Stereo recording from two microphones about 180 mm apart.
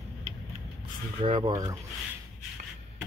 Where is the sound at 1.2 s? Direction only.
25° right (ahead or behind).